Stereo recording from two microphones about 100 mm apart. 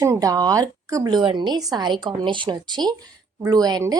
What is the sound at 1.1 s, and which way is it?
A woman's voice, 50° right (ahead or behind).